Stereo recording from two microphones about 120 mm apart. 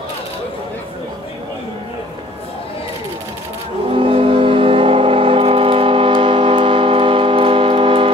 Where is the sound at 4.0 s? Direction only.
50° right (ahead or behind).